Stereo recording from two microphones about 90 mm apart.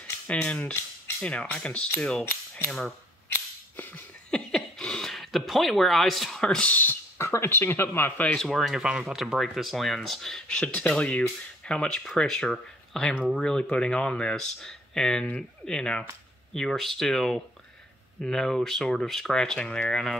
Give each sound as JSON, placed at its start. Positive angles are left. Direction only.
{"t": 0.3, "sound": "speech", "side_deg": 15}
{"t": 3.3, "sound": "music", "side_deg": 20}
{"t": 4.3, "sound": "speech", "side_deg": 5}
{"t": 8.4, "sound": "speech", "side_deg": 0}